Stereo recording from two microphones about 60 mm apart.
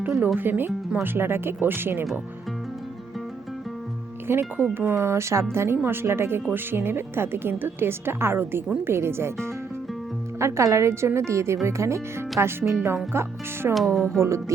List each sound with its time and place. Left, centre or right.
0.3 s speech: right
4.3 s a woman's voice: right
10.3 s a woman's voice: right
13.7 s speech: centre
14.2 s music: right